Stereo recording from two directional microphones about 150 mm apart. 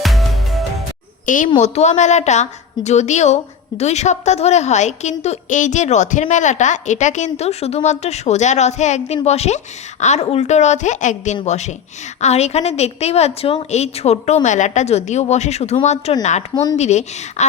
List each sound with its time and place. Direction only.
0.0 s music: centre (ahead or behind)
1.5 s a woman's voice: 50° left (ahead or behind)